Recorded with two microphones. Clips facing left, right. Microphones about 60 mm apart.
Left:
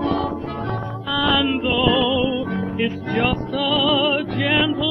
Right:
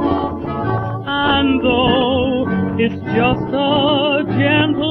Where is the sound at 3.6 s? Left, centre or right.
Centre.